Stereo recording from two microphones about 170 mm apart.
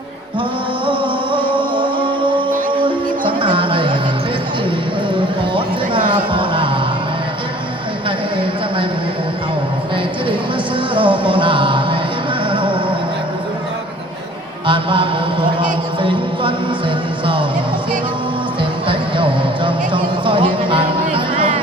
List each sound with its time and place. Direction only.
0.9 s music: 30° right (ahead or behind)
5.5 s a sound: 30° right (ahead or behind)
10.9 s music: 30° right (ahead or behind)
14.7 s mantra: 30° right (ahead or behind)
18.9 s music: 30° right (ahead or behind)